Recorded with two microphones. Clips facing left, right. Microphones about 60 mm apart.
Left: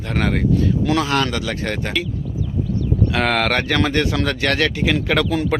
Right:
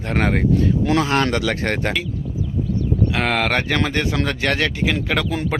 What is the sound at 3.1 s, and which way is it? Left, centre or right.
Speech, centre.